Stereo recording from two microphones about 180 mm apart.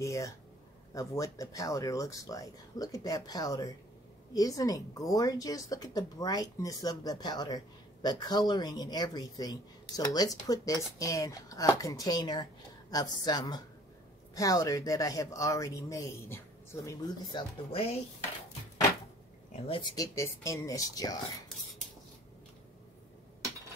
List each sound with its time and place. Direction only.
0.0 s speech: 15° left (ahead or behind)
19.5 s speech: 30° left (ahead or behind)
20.0 s speech: 15° left (ahead or behind)